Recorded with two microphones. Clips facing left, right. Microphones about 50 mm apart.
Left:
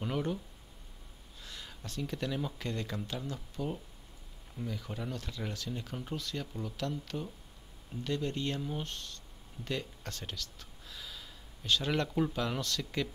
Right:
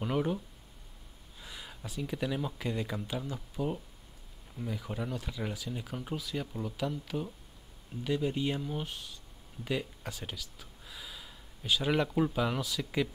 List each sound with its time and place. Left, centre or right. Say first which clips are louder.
0.0 s speech: right 3 dB; centre
1.4 s speech: right 2 dB; centre